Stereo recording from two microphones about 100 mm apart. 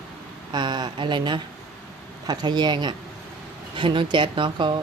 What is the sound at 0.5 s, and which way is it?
Speech, 45° right (ahead or behind).